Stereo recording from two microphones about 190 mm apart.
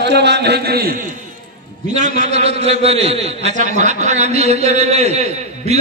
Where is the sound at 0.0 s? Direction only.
65° right (ahead or behind).